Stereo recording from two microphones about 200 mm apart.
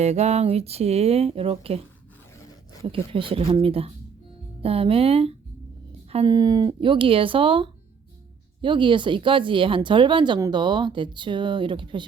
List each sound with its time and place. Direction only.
0.0 s speech: 35° right (ahead or behind)
2.8 s speech: 25° right (ahead or behind)